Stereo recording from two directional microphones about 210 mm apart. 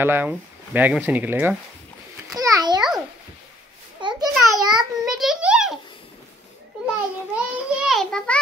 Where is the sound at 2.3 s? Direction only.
15° right (ahead or behind).